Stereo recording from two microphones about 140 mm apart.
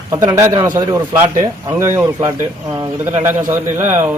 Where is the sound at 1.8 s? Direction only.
20° right (ahead or behind).